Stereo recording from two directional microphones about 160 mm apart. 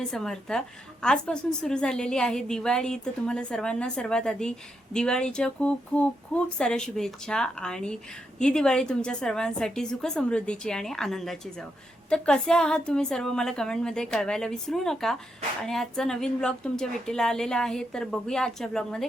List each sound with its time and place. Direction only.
0.0 s a woman's voice: 5° left (ahead or behind)